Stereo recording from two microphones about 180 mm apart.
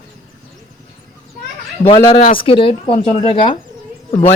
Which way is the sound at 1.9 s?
30° left (ahead or behind).